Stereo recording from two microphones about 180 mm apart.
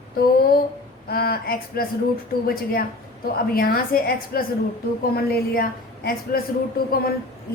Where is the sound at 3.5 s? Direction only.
55° left (ahead or behind).